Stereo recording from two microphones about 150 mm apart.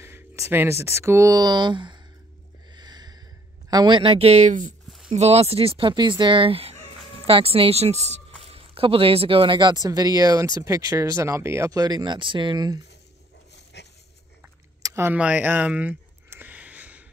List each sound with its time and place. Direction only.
0.0 s speech: 15° right (ahead or behind)
2.7 s snort: 30° right (ahead or behind)
3.7 s speech: 30° right (ahead or behind); by 4.7 s 55° right (ahead or behind)
5.1 s speech: 45° right (ahead or behind); by 12.8 s 25° right (ahead or behind)
14.8 s a sound: 20° right (ahead or behind)